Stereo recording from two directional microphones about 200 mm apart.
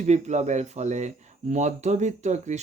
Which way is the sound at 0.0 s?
35° right (ahead or behind).